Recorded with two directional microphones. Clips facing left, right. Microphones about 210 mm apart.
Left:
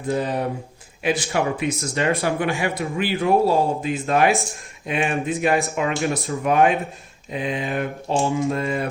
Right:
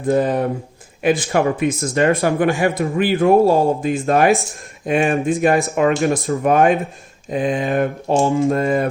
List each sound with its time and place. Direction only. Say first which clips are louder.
0.1 s speech: right 6 dB; 50° right (ahead or behind)